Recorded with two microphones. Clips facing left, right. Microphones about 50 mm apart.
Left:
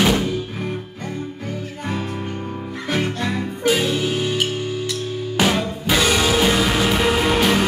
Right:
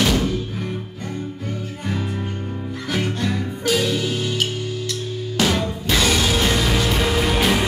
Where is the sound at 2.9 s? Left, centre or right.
Left.